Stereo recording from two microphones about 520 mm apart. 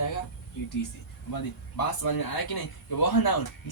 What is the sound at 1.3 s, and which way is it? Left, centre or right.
A man's voice, left.